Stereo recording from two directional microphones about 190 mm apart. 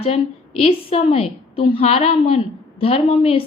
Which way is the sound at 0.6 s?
30° left (ahead or behind).